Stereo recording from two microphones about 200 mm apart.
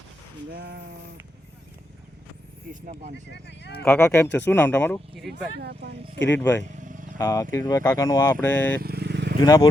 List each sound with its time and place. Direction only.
0.5 s speech: 45° right (ahead or behind)
3.3 s speech: 60° left (ahead or behind)
3.8 s speech: 15° left (ahead or behind)
5.5 s speech: 55° right (ahead or behind)
6.3 s speech: 10° left (ahead or behind)
6.7 s vehicle: 40° right (ahead or behind)
7.2 s speech: 15° left (ahead or behind)
8.8 s vehicle: 55° right (ahead or behind)
9.4 s speech: 20° left (ahead or behind)